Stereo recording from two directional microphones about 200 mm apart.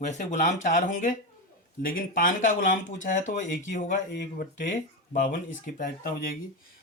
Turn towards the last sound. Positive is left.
turn(degrees=45)  # may be behind; listen again after turning